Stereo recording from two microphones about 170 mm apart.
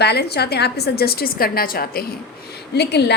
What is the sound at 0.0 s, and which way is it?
A woman's voice, 75° left (ahead or behind).